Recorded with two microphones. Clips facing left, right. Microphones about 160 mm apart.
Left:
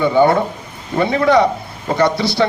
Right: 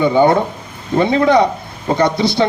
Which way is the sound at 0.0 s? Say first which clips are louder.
Right 1 dB; 20° right (ahead or behind).